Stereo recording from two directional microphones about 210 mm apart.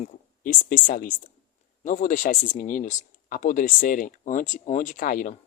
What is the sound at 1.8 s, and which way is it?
Speech, 35° left (ahead or behind).